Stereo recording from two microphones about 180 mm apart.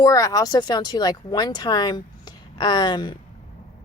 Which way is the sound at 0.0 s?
20° left (ahead or behind).